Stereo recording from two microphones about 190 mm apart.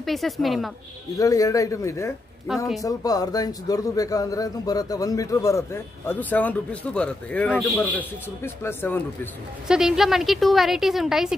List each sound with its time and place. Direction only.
0.0 s a woman's voice: centre (ahead or behind)
1.1 s a man's voice: 15° left (ahead or behind)
2.5 s a woman's voice: centre (ahead or behind)
2.8 s a man's voice: 20° left (ahead or behind)
9.7 s a woman's voice: 5° right (ahead or behind)